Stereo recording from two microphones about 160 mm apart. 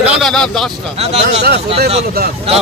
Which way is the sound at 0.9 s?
40° right (ahead or behind).